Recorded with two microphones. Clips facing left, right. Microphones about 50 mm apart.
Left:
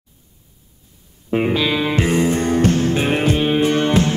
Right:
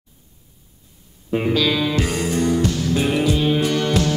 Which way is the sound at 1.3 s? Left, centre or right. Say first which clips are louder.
Left 1 dB; left.